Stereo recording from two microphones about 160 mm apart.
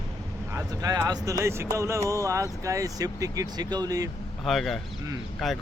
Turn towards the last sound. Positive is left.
turn(degrees=0)  # may be behind; listen again after turning